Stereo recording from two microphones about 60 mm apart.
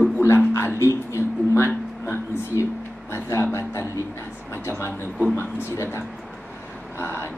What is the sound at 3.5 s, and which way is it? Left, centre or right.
Speech, left.